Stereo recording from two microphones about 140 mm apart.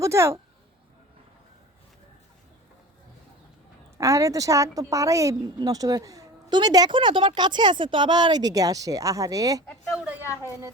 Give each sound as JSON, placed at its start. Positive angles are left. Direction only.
{"t": 0.0, "sound": "speech", "side_deg": -20}
{"t": 3.9, "sound": "a woman's voice", "side_deg": -20}
{"t": 9.9, "sound": "a woman's voice", "side_deg": -5}